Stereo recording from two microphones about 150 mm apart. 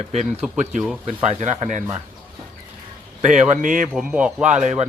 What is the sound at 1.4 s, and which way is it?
Speech, 50° right (ahead or behind).